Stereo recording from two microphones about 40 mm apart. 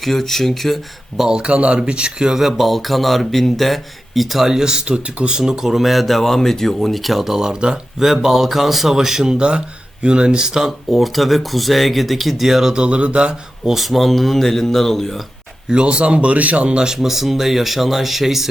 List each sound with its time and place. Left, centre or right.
0.0 s speech: centre
1.3 s speech: right
10.9 s speech: centre
12.7 s speech: right
13.7 s speech: centre
15.7 s speech: right
16.7 s speech: centre